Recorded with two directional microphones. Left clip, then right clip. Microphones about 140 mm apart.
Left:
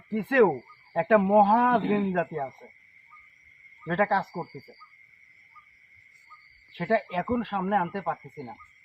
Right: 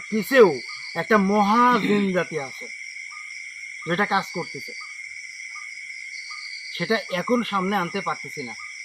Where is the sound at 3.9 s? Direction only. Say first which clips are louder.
Right 2 dB; 5° left (ahead or behind).